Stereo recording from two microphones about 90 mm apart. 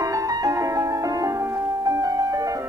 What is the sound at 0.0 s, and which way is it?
Music, 40° right (ahead or behind).